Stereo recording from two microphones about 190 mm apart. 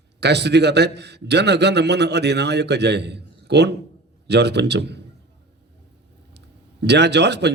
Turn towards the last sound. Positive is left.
turn(degrees=-65)  # may be behind; listen again after turning